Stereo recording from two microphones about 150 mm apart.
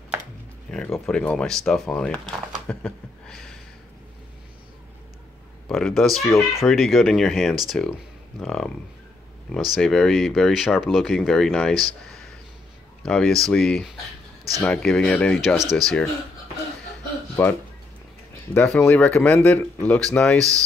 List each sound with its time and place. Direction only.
0.7 s a sound: 5° left (ahead or behind)
1.0 s speech: 5° left (ahead or behind)
2.7 s a sound: 5° left (ahead or behind)
5.7 s speech: centre (ahead or behind)
13.0 s speech: 5° left (ahead or behind)
17.4 s speech: 10° left (ahead or behind)